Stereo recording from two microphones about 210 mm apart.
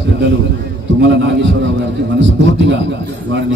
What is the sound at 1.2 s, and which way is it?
A man's voice, 60° right (ahead or behind).